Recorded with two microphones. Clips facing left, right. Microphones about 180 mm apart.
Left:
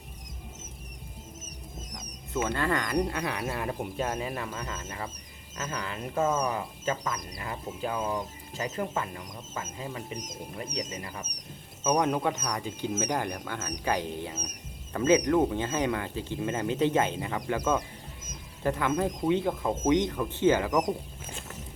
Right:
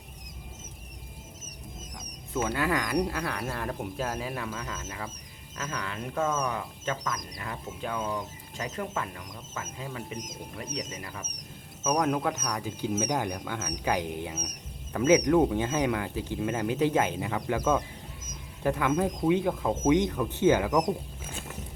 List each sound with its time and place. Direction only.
2.3 s speech: 10° right (ahead or behind)